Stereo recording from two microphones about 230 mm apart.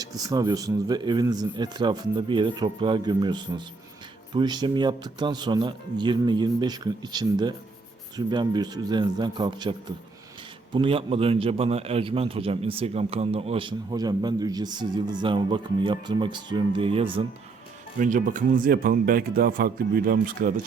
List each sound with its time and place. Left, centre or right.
0.0 s a man's voice: centre
18.0 s speech: right